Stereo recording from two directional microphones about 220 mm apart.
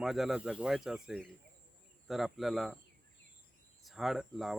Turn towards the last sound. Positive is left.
turn(degrees=0)  # may be behind; listen again after turning